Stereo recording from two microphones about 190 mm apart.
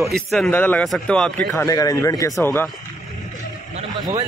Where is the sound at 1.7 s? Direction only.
15° left (ahead or behind).